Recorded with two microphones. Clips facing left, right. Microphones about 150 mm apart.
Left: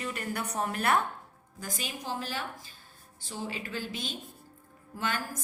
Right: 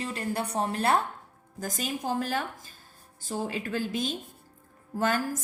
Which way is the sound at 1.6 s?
45° right (ahead or behind).